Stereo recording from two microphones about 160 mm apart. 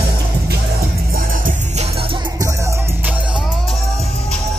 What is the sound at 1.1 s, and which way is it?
Music, 60° right (ahead or behind).